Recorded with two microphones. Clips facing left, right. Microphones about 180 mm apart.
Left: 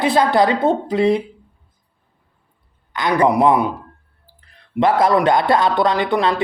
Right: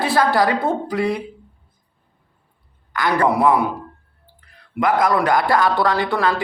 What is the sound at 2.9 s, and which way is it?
Speech, 20° left (ahead or behind).